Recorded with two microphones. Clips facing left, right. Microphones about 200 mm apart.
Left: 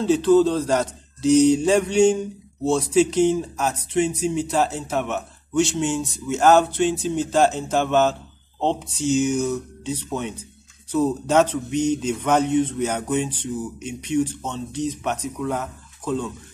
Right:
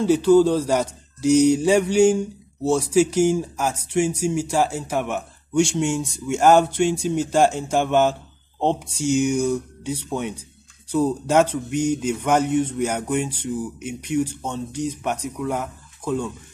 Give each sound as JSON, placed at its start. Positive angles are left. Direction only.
{"t": 0.0, "sound": "speech", "side_deg": -10}